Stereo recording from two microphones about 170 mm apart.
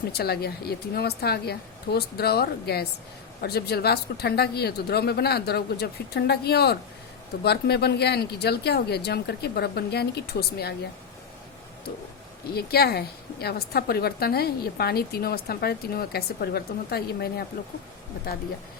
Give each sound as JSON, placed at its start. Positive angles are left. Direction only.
{"t": 0.1, "sound": "a woman's voice", "side_deg": 70}
{"t": 12.5, "sound": "a woman's voice", "side_deg": 65}